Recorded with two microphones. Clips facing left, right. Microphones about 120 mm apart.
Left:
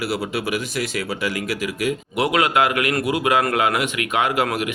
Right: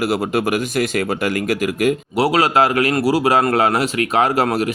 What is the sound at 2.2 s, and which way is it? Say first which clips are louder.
A man's voice: right 3 dB; 30° right (ahead or behind).